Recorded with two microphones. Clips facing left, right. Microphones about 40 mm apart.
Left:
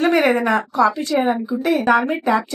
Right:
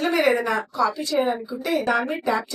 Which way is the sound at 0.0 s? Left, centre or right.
Left.